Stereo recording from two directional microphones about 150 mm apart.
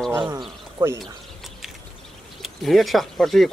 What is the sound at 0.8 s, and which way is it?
Speech, 20° right (ahead or behind).